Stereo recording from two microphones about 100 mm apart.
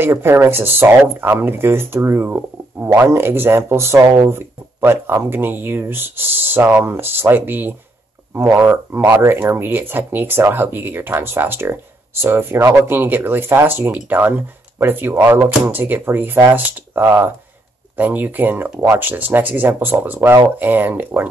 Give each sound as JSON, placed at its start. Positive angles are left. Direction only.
{"t": 0.0, "sound": "speech", "side_deg": -25}